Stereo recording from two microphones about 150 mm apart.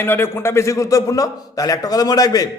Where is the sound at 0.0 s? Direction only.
15° left (ahead or behind).